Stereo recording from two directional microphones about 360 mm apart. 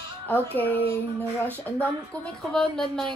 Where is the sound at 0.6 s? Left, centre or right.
Centre.